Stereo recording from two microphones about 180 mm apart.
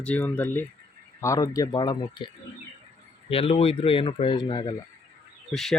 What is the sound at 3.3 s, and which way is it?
Speech, 30° left (ahead or behind).